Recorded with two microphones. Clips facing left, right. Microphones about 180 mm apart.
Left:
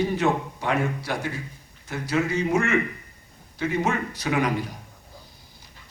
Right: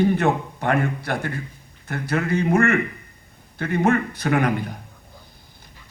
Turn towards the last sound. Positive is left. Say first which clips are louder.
# right 3 dB
turn(degrees=-55)  # may be behind; listen again after turning